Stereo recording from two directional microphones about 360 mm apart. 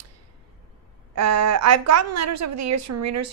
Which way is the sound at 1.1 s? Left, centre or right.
Right.